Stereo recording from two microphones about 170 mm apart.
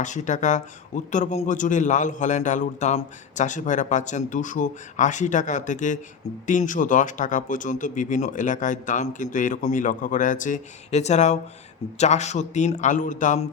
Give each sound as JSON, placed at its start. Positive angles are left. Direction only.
{"t": 0.0, "sound": "speech", "side_deg": 45}